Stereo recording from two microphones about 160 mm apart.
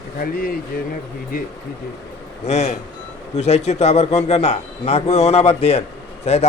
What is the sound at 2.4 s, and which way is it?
A man's voice, 45° left (ahead or behind).